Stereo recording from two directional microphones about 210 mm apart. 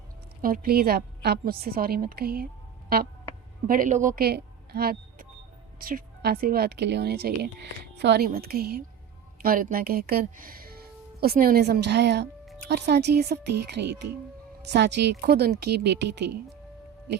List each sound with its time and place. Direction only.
0.4 s a woman's voice: 45° right (ahead or behind)
3.7 s a woman's voice: 40° right (ahead or behind); by 16.4 s 55° right (ahead or behind)